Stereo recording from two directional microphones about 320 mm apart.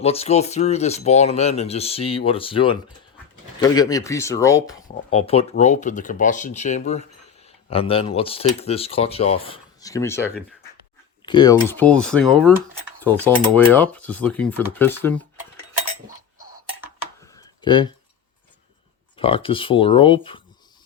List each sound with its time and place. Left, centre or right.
0.0 s speech: centre
13.7 s speech: centre
17.3 s a sound: centre
19.1 s speech: centre